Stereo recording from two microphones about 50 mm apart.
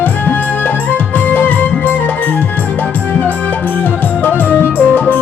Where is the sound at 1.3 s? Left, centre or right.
Left.